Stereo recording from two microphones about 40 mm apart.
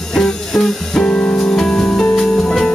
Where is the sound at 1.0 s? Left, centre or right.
Left.